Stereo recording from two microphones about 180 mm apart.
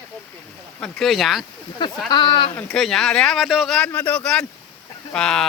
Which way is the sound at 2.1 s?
25° left (ahead or behind).